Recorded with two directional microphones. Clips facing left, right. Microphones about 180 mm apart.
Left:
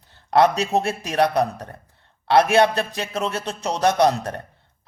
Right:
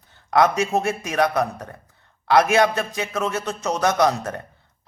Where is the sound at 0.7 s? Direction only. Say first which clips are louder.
Left 1 dB; 30° left (ahead or behind).